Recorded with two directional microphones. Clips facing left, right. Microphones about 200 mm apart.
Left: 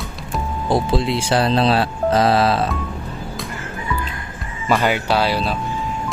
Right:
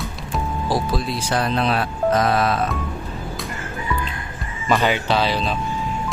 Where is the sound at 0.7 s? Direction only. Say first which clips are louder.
Left 6 dB; 25° left (ahead or behind).